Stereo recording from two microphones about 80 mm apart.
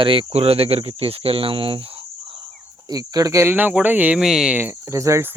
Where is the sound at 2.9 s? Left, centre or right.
Right.